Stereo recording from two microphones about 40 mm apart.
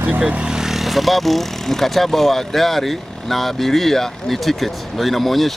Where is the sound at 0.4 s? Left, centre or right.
Centre.